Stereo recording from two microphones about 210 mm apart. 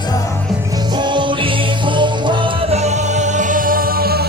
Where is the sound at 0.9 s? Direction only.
20° right (ahead or behind).